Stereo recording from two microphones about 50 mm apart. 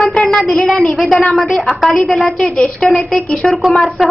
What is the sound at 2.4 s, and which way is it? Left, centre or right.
Speech, centre.